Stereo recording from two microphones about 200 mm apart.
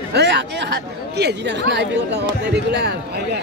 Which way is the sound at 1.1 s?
60° right (ahead or behind).